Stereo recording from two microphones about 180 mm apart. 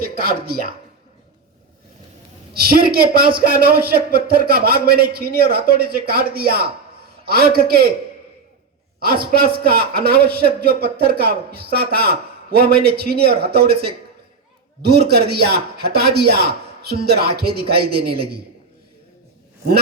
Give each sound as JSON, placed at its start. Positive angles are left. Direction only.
{"t": 0.0, "sound": "a sound", "side_deg": -55}
{"t": 2.6, "sound": "a man's voice", "side_deg": -60}
{"t": 9.0, "sound": "a man's voice", "side_deg": -55}